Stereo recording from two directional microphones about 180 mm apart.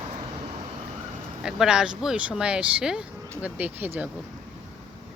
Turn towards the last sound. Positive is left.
turn(degrees=-10)  # may be behind; listen again after turning